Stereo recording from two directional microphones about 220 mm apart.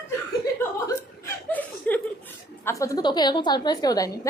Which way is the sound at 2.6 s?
15° left (ahead or behind).